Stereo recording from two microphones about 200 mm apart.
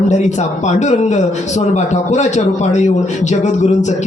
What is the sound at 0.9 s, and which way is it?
A man's voice, 35° left (ahead or behind).